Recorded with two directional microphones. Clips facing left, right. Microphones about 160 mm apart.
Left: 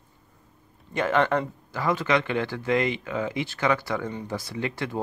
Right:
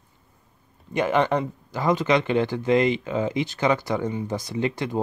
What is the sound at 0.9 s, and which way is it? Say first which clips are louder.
Speech: right 2 dB; 15° right (ahead or behind).